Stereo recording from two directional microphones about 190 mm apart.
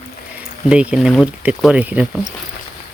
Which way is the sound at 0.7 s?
5° right (ahead or behind).